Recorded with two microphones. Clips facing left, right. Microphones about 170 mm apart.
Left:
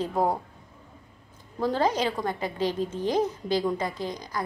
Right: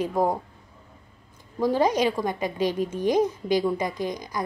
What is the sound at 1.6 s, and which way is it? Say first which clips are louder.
A woman's voice: right 3 dB; 15° right (ahead or behind).